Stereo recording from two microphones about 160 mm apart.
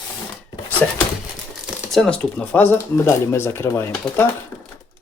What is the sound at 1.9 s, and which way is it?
Speech, 5° left (ahead or behind).